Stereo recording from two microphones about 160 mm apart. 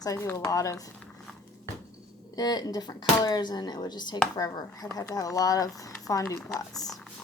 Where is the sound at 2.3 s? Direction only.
25° left (ahead or behind).